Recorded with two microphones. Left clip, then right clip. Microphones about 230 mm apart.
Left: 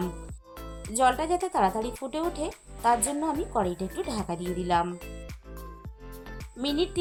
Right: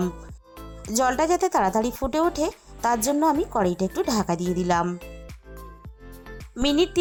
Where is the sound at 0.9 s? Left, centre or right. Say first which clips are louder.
Right 3 dB; right.